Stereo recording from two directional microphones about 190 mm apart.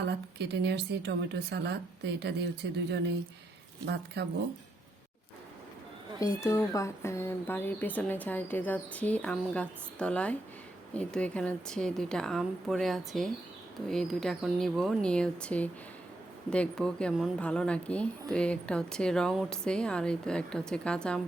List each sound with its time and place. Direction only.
0.1 s speech: 65° right (ahead or behind)
3.8 s speech: 60° right (ahead or behind)
6.1 s speech: 15° left (ahead or behind)